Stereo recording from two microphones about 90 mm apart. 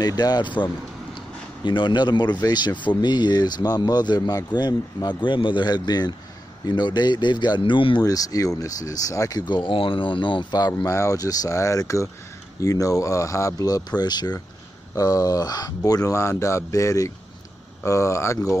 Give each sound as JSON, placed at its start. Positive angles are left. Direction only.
{"t": 0.0, "sound": "speech", "side_deg": 50}
{"t": 1.6, "sound": "speech", "side_deg": 60}
{"t": 8.0, "sound": "speech", "side_deg": 40}
{"t": 9.4, "sound": "speech", "side_deg": 60}
{"t": 10.8, "sound": "speech", "side_deg": 35}